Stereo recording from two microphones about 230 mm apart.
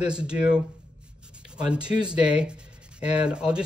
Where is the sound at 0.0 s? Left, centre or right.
Centre.